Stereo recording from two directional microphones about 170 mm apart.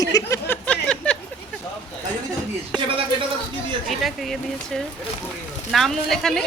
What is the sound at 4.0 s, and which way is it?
Speech, centre (ahead or behind).